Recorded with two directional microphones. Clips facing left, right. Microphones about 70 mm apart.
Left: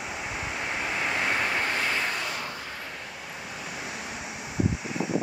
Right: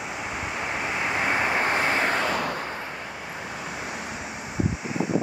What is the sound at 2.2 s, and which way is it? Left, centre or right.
Vehicle, right.